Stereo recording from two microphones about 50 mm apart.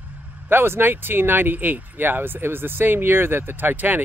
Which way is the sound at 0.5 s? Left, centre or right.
Right.